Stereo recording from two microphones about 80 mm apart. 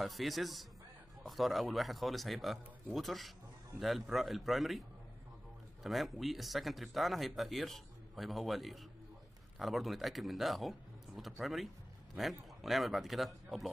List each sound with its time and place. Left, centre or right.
0.0 s speech: centre
5.9 s speech: centre